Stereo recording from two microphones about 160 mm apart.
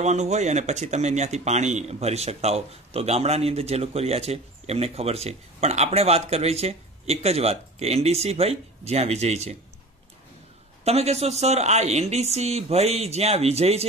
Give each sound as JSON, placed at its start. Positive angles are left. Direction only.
{"t": 0.0, "sound": "speech", "side_deg": -45}
{"t": 10.8, "sound": "speech", "side_deg": -40}